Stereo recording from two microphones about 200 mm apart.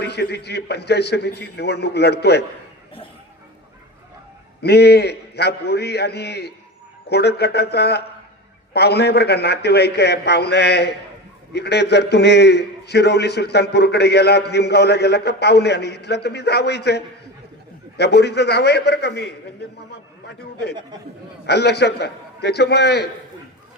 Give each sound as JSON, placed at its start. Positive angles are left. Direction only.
{"t": 0.0, "sound": "a man's voice", "side_deg": 55}
{"t": 4.6, "sound": "a man's voice", "side_deg": 55}